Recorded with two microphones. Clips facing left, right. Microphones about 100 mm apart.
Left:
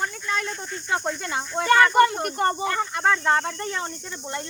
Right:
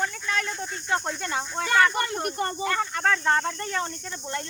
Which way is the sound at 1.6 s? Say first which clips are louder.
Left 6 dB; 55° left (ahead or behind).